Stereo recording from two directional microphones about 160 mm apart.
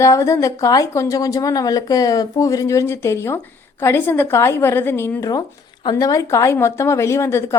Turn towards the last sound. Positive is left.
turn(degrees=15)  # may be behind; listen again after turning